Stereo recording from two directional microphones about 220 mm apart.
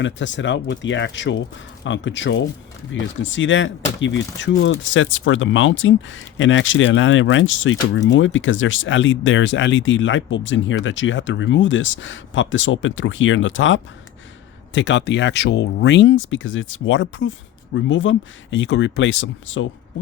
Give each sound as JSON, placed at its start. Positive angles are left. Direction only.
{"t": 0.0, "sound": "speech", "side_deg": 55}